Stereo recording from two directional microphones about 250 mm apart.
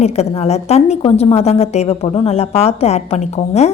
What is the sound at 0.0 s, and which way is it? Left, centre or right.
A woman's voice, left.